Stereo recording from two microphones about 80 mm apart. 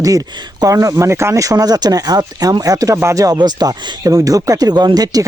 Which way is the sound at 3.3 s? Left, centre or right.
Right.